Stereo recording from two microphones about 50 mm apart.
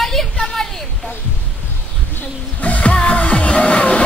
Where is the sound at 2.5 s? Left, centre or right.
Left.